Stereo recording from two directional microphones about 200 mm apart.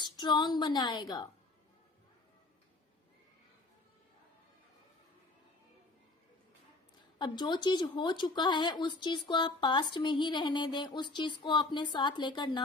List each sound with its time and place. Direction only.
0.0 s speech: 20° left (ahead or behind)
7.2 s speech: 20° left (ahead or behind)